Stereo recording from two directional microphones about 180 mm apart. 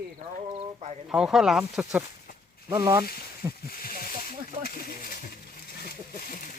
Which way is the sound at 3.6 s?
55° left (ahead or behind).